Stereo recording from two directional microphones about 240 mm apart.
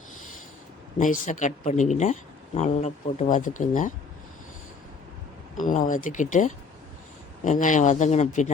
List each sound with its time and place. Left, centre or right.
0.9 s speech: left
5.5 s speech: left